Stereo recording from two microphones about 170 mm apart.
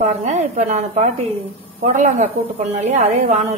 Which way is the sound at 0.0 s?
40° right (ahead or behind).